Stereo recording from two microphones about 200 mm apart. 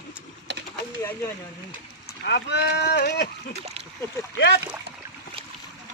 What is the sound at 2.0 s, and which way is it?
Speech, 60° left (ahead or behind).